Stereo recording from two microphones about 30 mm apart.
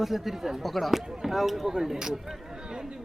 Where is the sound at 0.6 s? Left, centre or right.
Centre.